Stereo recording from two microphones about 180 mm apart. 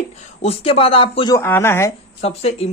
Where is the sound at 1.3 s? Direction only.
15° left (ahead or behind).